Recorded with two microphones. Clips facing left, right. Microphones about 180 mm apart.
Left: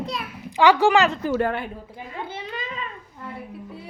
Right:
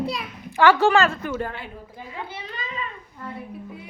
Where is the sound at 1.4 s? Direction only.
65° left (ahead or behind).